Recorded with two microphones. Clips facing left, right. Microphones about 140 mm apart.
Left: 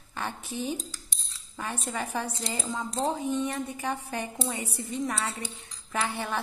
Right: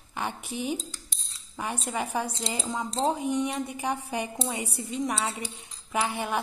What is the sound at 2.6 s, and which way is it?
A woman's voice, 25° right (ahead or behind).